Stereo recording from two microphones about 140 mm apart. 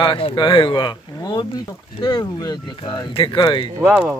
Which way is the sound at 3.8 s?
10° right (ahead or behind).